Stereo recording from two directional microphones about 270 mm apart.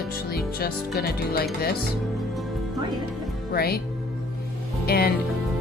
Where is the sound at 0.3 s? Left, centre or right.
Left.